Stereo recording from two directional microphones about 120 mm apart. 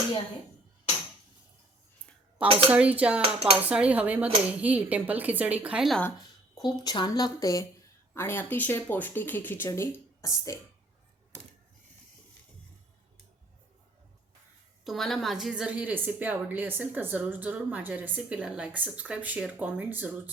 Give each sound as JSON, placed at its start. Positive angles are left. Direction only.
{"t": 2.6, "sound": "a woman's voice", "side_deg": -10}
{"t": 3.2, "sound": "speech", "side_deg": -50}
{"t": 3.7, "sound": "a woman's voice", "side_deg": -10}
{"t": 6.6, "sound": "speech", "side_deg": 35}
{"t": 14.8, "sound": "a woman's voice", "side_deg": 0}